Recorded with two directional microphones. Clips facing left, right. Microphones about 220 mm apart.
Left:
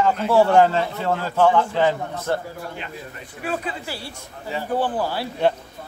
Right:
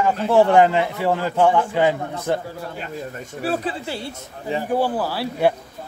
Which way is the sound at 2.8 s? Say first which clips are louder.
Right 5 dB; 40° right (ahead or behind).